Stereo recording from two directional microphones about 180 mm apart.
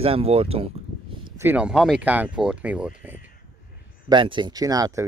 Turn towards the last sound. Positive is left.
turn(degrees=-20)  # may be behind; listen again after turning